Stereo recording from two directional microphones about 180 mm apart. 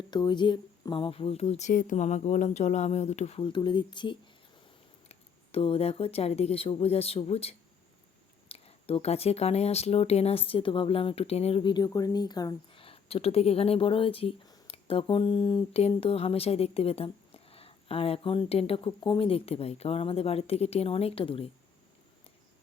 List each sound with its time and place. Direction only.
0.1 s speech: 25° left (ahead or behind)